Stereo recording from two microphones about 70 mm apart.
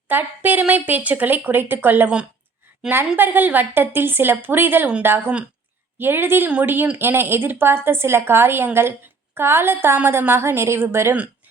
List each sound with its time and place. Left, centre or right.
0.1 s speech: right
3.2 s a woman's voice: right